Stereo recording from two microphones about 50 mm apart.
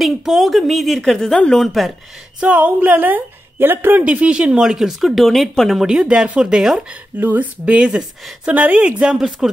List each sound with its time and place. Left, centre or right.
0.0 s speech: centre
2.4 s a woman's voice: right
4.0 s speech: right; by 5.5 s centre
5.9 s a woman's voice: centre
7.2 s a woman's voice: right
7.6 s a woman's voice: right